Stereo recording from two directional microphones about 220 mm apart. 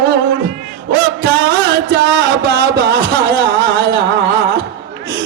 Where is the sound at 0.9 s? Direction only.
45° right (ahead or behind).